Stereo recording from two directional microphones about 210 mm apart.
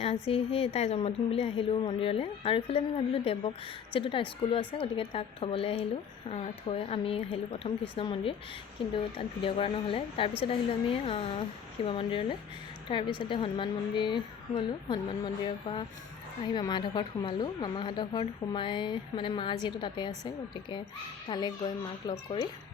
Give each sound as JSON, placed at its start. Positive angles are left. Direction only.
{"t": 0.0, "sound": "a woman's voice", "side_deg": 30}